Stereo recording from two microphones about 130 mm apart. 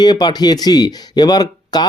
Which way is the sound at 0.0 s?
30° left (ahead or behind).